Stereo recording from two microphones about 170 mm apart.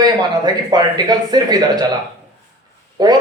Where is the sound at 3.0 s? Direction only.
25° right (ahead or behind).